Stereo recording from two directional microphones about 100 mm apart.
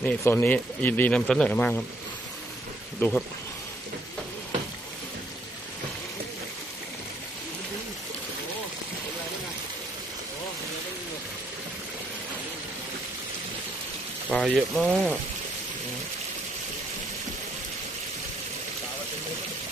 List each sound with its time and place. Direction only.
0.0 s speech: 15° left (ahead or behind)
3.0 s speech: 10° left (ahead or behind)
14.4 s speech: centre (ahead or behind)
14.8 s speech: 15° right (ahead or behind)